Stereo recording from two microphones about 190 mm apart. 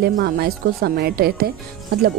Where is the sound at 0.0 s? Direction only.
55° right (ahead or behind).